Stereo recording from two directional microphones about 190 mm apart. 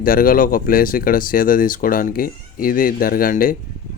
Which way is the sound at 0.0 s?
45° left (ahead or behind).